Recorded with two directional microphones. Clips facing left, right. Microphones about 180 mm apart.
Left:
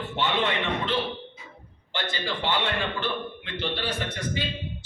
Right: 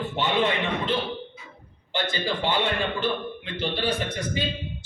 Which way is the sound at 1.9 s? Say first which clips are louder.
Right 4 dB; 15° right (ahead or behind).